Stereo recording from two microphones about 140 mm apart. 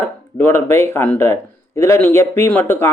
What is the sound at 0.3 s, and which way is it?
A man's voice, 15° left (ahead or behind).